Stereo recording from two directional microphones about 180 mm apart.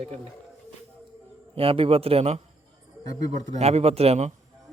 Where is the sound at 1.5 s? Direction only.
30° right (ahead or behind).